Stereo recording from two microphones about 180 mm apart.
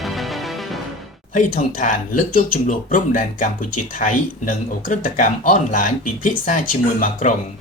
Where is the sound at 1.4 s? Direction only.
45° left (ahead or behind).